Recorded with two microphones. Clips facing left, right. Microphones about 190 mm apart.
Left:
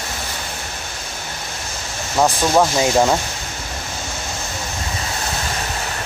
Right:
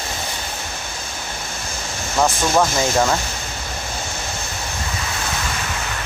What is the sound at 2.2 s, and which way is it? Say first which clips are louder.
Speech: left 2 dB; 10° left (ahead or behind).